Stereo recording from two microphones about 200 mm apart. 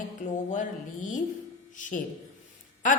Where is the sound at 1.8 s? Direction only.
40° left (ahead or behind).